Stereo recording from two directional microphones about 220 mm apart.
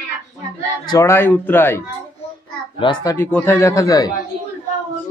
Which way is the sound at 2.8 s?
20° left (ahead or behind).